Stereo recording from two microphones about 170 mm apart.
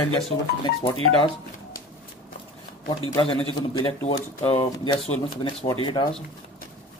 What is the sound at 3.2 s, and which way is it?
Speech, 30° left (ahead or behind).